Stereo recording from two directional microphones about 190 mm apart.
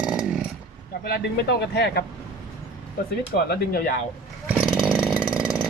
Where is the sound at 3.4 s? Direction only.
55° left (ahead or behind).